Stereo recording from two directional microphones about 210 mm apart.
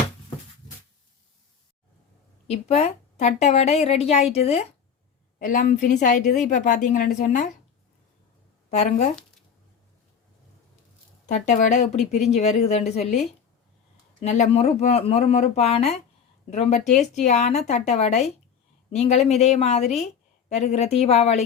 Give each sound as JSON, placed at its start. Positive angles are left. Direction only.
{"t": 2.5, "sound": "a woman's voice", "side_deg": 30}
{"t": 8.7, "sound": "a woman's voice", "side_deg": 30}
{"t": 11.3, "sound": "a woman's voice", "side_deg": 35}